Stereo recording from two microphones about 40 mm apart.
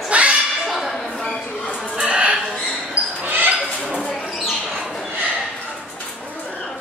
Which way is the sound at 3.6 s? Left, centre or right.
Left.